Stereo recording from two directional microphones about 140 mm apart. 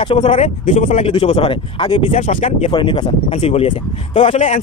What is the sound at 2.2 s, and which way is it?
Speech, 55° left (ahead or behind).